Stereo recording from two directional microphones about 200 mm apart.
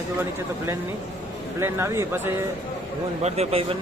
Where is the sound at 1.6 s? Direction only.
15° right (ahead or behind).